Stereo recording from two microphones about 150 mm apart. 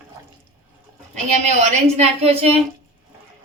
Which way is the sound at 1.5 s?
50° right (ahead or behind).